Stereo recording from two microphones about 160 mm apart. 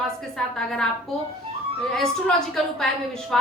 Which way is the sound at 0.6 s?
5° left (ahead or behind).